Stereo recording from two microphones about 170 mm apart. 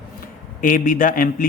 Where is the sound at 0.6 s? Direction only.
55° left (ahead or behind).